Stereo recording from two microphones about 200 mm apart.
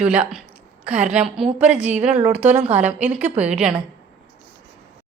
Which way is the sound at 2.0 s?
30° right (ahead or behind).